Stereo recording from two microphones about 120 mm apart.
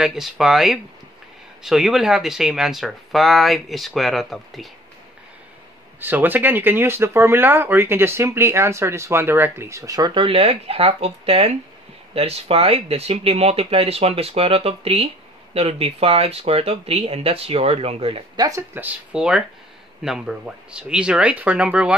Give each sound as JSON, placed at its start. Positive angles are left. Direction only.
{"t": 0.0, "sound": "speech", "side_deg": -5}
{"t": 5.9, "sound": "speech", "side_deg": -15}
{"t": 10.2, "sound": "speech", "side_deg": -50}
{"t": 18.3, "sound": "speech", "side_deg": -35}
{"t": 18.6, "sound": "speech", "side_deg": -15}